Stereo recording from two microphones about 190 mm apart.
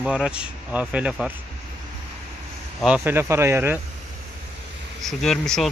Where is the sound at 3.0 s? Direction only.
15° right (ahead or behind).